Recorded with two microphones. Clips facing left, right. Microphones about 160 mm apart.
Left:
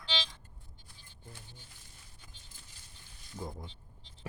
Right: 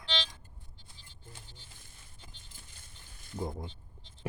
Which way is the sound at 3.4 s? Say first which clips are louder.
Right 5 dB; 25° right (ahead or behind).